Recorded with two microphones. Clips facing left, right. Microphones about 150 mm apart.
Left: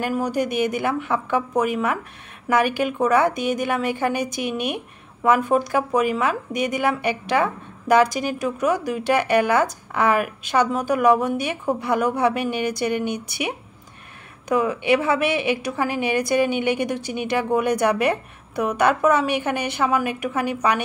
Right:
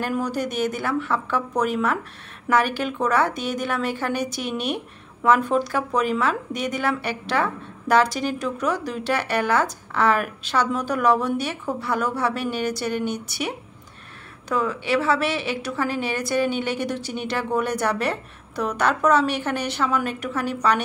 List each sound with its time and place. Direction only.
0.0 s a woman's voice: 10° left (ahead or behind)
11.1 s a woman's voice: 50° left (ahead or behind)
11.4 s a woman's voice: 15° left (ahead or behind)
14.5 s a woman's voice: 15° left (ahead or behind)